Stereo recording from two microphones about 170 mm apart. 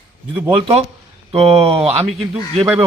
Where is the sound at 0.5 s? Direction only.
35° right (ahead or behind).